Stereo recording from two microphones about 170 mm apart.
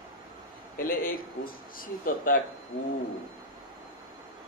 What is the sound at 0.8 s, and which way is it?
Speech, 60° left (ahead or behind).